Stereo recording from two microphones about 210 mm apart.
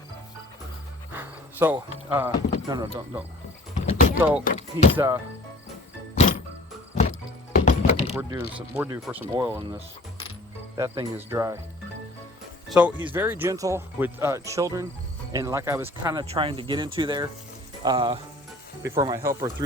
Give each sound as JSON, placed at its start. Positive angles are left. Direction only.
{"t": 1.1, "sound": "speech", "side_deg": -10}
{"t": 3.8, "sound": "vehicle", "side_deg": 35}
{"t": 4.2, "sound": "speech", "side_deg": -5}
{"t": 4.4, "sound": "speech", "side_deg": 35}
{"t": 4.9, "sound": "speech", "side_deg": -10}
{"t": 7.5, "sound": "music", "side_deg": 35}
{"t": 8.3, "sound": "speech", "side_deg": -10}
{"t": 10.8, "sound": "speech", "side_deg": -15}
{"t": 13.1, "sound": "speech", "side_deg": -10}
{"t": 16.3, "sound": "speech", "side_deg": -25}